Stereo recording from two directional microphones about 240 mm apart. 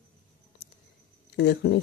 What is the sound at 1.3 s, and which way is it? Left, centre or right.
Speech, left.